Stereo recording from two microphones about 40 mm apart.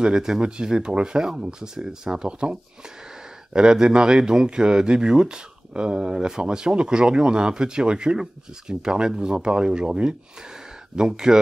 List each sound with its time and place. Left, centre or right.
0.0 s speech: centre
2.2 s a man's voice: right